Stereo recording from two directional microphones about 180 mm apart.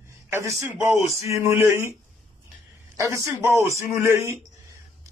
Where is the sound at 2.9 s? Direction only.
15° right (ahead or behind).